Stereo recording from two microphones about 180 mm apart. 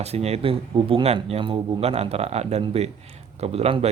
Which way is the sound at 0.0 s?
35° right (ahead or behind).